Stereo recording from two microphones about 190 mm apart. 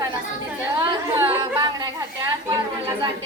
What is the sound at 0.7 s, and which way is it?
A woman's voice, 20° right (ahead or behind).